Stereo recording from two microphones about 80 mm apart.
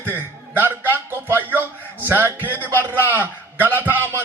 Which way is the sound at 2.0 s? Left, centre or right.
Right.